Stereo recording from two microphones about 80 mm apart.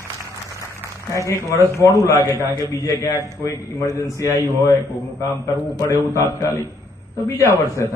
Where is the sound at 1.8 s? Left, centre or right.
Left.